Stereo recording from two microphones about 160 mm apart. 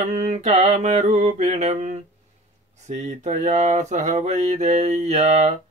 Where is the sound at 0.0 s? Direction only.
45° right (ahead or behind).